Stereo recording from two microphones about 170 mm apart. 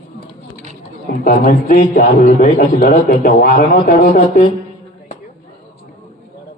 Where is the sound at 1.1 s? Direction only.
70° left (ahead or behind).